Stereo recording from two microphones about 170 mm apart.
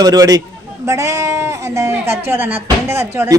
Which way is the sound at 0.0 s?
20° right (ahead or behind).